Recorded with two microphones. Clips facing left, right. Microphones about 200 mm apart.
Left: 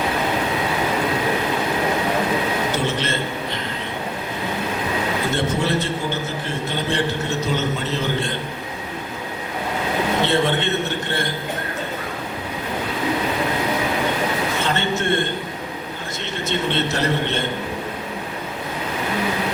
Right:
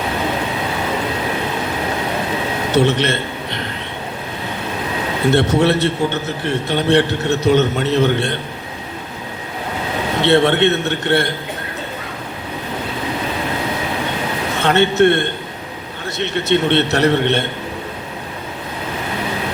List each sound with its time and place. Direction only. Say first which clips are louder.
2.7 s a man's voice: right 7 dB; 70° right (ahead or behind)
5.3 s a man's voice: right 10 dB; 70° right (ahead or behind)
10.2 s a man's voice: right 7 dB; 70° right (ahead or behind)
14.6 s a man's voice: right 9 dB; 65° right (ahead or behind)